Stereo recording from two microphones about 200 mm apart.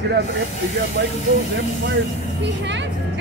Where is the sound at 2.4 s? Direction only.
60° right (ahead or behind).